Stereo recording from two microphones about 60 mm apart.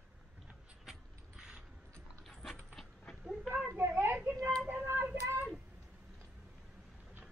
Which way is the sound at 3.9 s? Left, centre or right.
Right.